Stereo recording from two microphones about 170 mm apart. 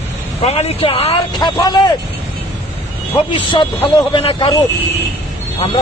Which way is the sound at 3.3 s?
25° left (ahead or behind).